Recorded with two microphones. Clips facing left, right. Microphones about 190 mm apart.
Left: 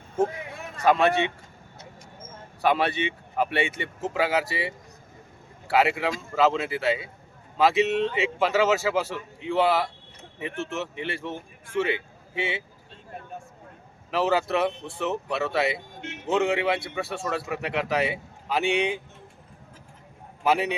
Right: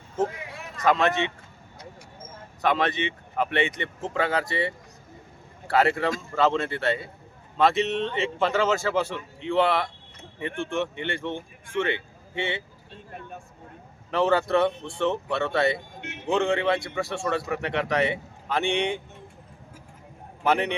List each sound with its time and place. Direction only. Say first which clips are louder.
0.9 s speech: left 2 dB; 10° left (ahead or behind)
2.6 s a man's voice: left 1 dB; 10° left (ahead or behind)
14.1 s a man's voice: right 2 dB; 5° left (ahead or behind)
20.4 s a man's voice: even; 5° left (ahead or behind)